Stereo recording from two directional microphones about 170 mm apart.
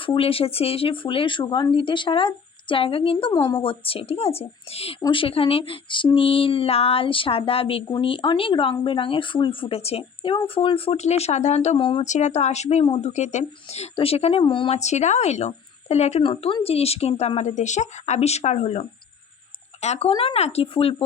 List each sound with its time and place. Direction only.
0.0 s speech: 30° left (ahead or behind)
12.0 s speech: 45° left (ahead or behind)